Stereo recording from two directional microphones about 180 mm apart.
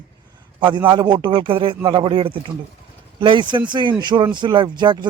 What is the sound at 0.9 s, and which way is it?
Speech, 25° right (ahead or behind).